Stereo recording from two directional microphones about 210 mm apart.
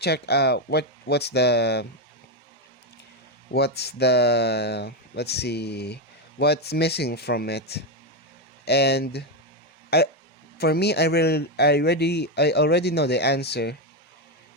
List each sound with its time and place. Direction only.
0.0 s speech: 50° left (ahead or behind)
3.5 s speech: 50° left (ahead or behind)